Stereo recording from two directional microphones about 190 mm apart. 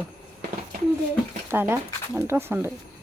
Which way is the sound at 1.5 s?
10° right (ahead or behind).